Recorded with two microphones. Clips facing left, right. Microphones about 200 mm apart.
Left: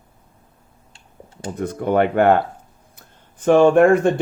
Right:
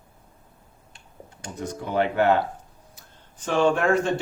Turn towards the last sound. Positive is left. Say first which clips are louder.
# left 8 dB
turn(degrees=55)  # may be behind; listen again after turning